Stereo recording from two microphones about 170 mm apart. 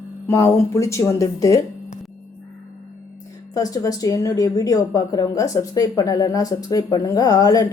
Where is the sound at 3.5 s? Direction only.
20° left (ahead or behind).